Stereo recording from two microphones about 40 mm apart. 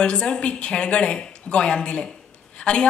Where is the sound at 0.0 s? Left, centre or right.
Left.